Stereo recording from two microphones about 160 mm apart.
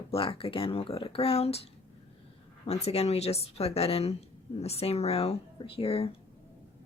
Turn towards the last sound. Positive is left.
turn(degrees=35)  # may be behind; listen again after turning